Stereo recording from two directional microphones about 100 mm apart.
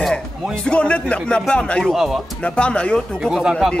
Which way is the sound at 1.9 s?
5° right (ahead or behind).